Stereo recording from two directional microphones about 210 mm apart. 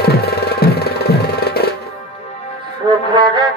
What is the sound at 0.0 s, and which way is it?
Music, 50° left (ahead or behind).